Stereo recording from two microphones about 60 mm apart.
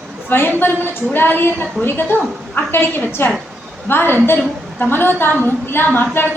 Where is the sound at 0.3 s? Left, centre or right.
Left.